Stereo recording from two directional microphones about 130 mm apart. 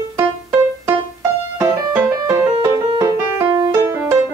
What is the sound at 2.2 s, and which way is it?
Music, 30° right (ahead or behind).